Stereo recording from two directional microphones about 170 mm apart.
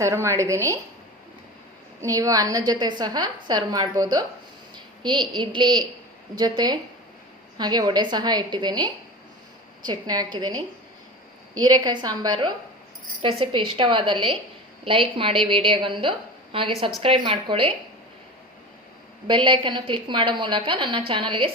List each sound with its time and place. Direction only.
0.0 s a woman's voice: 15° right (ahead or behind)
2.0 s a woman's voice: 20° right (ahead or behind)
19.3 s a woman's voice: 30° right (ahead or behind)